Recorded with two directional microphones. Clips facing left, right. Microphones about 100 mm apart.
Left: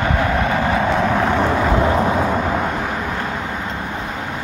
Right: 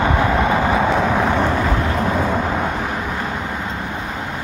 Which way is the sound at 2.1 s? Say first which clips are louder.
Left 1 dB; centre (ahead or behind).